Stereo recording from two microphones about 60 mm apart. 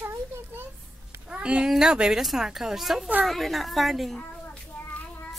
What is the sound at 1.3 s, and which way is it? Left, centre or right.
Speech, centre.